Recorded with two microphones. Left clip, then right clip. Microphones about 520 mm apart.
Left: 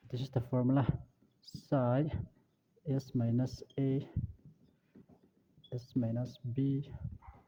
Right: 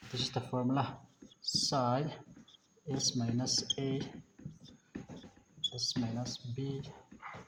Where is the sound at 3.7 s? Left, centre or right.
Left.